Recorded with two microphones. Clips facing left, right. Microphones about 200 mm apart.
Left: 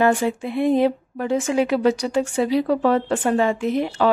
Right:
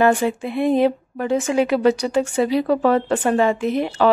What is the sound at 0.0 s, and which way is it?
Speech, 65° right (ahead or behind).